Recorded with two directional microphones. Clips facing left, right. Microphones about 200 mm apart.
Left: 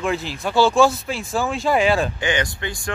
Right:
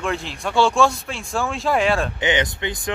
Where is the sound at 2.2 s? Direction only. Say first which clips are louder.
Right 2 dB; 20° right (ahead or behind).